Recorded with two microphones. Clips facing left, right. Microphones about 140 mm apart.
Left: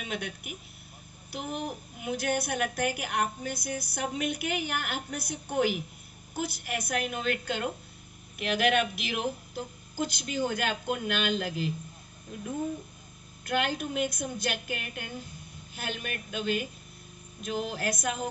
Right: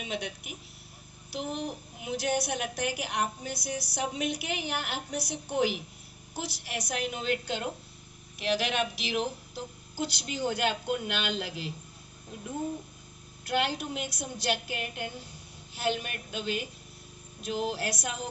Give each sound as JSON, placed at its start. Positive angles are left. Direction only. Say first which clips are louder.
{"t": 0.0, "sound": "a woman's voice", "louder": "even", "side_deg": 50}
{"t": 13.5, "sound": "a woman's voice", "louder": "even", "side_deg": 50}